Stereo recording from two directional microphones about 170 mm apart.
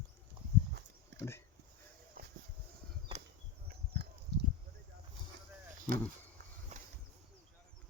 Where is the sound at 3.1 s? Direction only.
30° right (ahead or behind).